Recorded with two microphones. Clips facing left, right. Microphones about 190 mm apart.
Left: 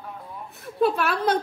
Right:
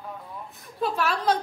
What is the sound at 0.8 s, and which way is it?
Speech, 60° left (ahead or behind).